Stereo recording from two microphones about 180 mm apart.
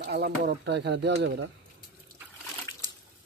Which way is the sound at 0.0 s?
65° right (ahead or behind).